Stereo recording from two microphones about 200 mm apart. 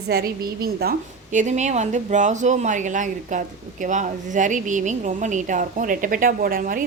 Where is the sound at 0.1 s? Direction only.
55° right (ahead or behind).